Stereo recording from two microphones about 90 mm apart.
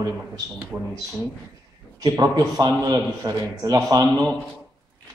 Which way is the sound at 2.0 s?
45° right (ahead or behind).